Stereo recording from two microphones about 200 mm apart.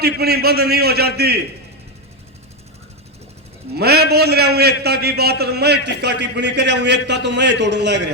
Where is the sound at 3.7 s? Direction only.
55° right (ahead or behind).